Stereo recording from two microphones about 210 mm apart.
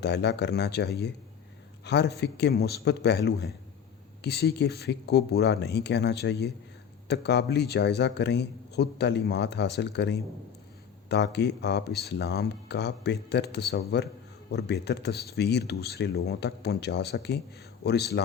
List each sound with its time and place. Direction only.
0.0 s a man's voice: 50° left (ahead or behind)